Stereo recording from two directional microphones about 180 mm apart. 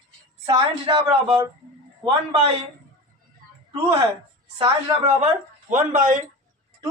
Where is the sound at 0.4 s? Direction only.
25° right (ahead or behind).